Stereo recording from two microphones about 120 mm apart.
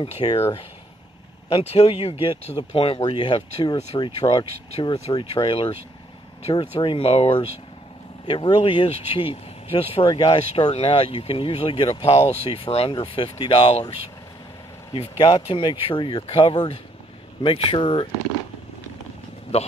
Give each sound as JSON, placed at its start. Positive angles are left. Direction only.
{"t": 0.0, "sound": "speech", "side_deg": 50}
{"t": 1.5, "sound": "speech", "side_deg": 55}
{"t": 4.2, "sound": "speech", "side_deg": 40}